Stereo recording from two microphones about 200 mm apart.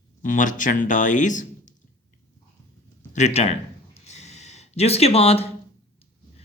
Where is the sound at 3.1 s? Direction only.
35° left (ahead or behind).